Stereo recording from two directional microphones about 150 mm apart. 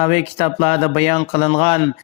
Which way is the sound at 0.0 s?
40° left (ahead or behind).